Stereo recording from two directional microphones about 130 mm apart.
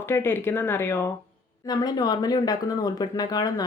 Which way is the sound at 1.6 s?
30° left (ahead or behind).